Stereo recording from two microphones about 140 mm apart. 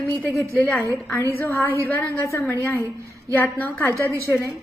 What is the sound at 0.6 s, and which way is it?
A woman's voice, 10° left (ahead or behind).